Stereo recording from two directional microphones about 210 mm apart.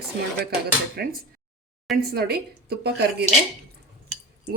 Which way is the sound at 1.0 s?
50° right (ahead or behind).